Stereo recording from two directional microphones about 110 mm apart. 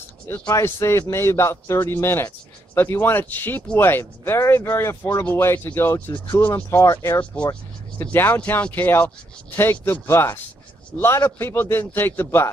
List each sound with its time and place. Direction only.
0.5 s a man's voice: 25° left (ahead or behind)